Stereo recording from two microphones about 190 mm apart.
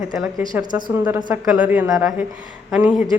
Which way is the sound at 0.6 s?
20° right (ahead or behind).